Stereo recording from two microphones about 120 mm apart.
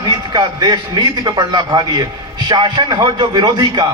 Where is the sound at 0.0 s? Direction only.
35° right (ahead or behind).